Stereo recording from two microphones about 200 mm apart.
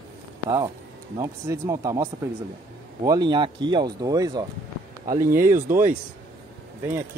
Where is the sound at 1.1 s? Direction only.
15° right (ahead or behind).